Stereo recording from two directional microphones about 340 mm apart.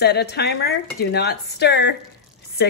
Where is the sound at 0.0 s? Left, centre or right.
Left.